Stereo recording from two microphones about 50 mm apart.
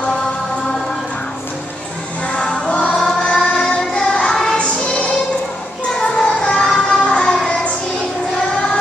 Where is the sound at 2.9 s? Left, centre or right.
Centre.